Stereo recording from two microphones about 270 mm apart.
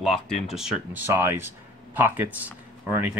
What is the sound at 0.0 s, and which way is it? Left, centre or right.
Speech, centre.